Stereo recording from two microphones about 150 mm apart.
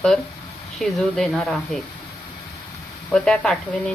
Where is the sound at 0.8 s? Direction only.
Centre (ahead or behind).